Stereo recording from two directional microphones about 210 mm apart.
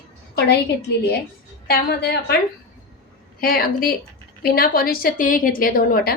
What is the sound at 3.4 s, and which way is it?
A woman's voice, 45° left (ahead or behind).